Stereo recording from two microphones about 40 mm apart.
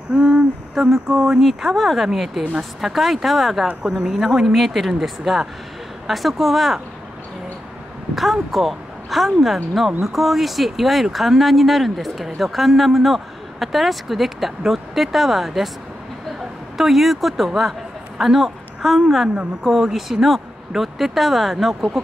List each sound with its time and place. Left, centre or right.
0.1 s a sound: centre
1.0 s speech: centre
1.7 s speech: centre
3.8 s speech: centre
8.2 s speech: centre
16.7 s a woman's voice: centre